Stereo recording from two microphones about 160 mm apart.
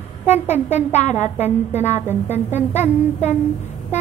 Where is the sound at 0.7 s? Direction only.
45° left (ahead or behind).